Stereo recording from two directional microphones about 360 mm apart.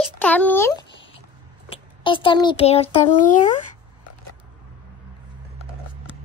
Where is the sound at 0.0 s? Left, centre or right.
Centre.